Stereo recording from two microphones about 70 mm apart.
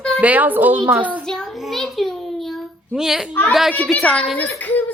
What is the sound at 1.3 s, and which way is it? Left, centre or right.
A child's voice, centre.